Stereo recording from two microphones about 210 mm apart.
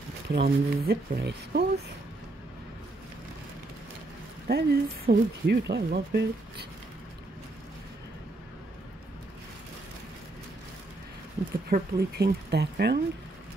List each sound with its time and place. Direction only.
0.3 s speech: 50° right (ahead or behind)
4.5 s speech: 50° right (ahead or behind)
11.7 s speech: 50° right (ahead or behind)